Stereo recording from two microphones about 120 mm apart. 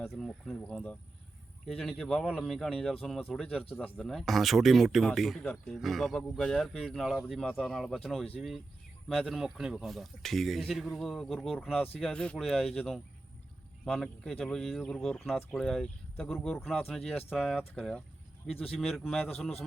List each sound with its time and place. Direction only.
0.1 s speech: centre (ahead or behind)
0.6 s speech: 10° left (ahead or behind)
18.4 s speech: 55° left (ahead or behind)
18.8 s speech: centre (ahead or behind)
19.0 s speech: 10° left (ahead or behind)